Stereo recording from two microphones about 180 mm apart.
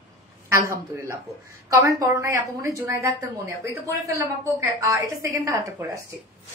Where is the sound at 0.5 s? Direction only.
15° right (ahead or behind).